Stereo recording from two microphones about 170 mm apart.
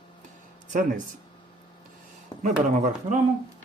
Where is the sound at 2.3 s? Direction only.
25° left (ahead or behind).